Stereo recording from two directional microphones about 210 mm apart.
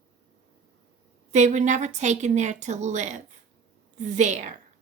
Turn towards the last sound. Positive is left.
turn(degrees=-35)  # may be behind; listen again after turning